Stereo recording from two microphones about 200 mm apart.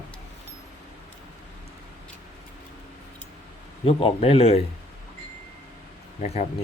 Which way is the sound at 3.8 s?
30° left (ahead or behind).